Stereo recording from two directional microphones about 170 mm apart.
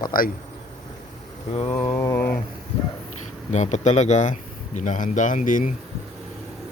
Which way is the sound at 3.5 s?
45° left (ahead or behind).